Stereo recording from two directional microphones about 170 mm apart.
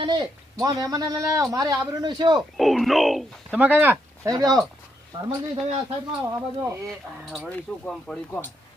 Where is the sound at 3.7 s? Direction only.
10° right (ahead or behind).